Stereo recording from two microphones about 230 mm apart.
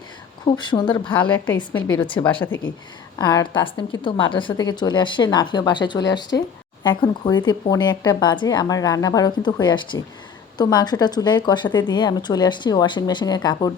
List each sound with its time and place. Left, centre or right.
0.4 s a woman's voice: centre
1.3 s a woman's voice: centre
2.0 s a woman's voice: left